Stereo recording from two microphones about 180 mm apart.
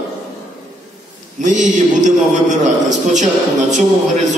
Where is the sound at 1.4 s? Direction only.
45° right (ahead or behind).